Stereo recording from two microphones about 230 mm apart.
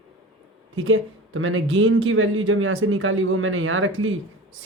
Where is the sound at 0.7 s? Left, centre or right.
Right.